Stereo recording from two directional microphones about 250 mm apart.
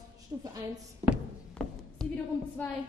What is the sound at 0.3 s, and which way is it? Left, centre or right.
Speech, centre.